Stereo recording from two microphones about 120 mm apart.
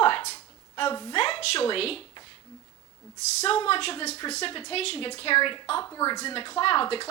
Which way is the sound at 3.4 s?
50° left (ahead or behind).